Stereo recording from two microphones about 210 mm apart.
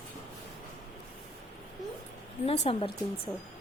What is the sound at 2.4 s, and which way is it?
Speech, 30° left (ahead or behind).